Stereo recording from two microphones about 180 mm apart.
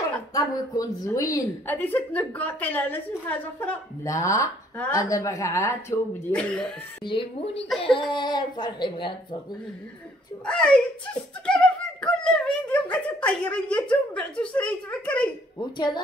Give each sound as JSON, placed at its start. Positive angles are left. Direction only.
{"t": 0.3, "sound": "a woman's voice", "side_deg": 20}
{"t": 7.1, "sound": "speech", "side_deg": 30}
{"t": 10.4, "sound": "a woman's voice", "side_deg": 5}